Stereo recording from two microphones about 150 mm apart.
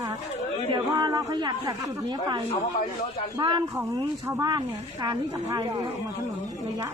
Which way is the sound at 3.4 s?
30° right (ahead or behind).